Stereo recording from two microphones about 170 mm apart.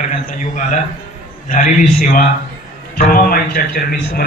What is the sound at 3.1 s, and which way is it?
A man's voice, 60° left (ahead or behind).